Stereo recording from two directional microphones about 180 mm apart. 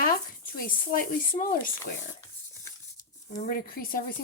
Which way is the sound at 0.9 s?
50° left (ahead or behind).